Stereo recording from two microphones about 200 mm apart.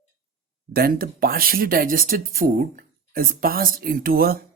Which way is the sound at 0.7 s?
50° right (ahead or behind).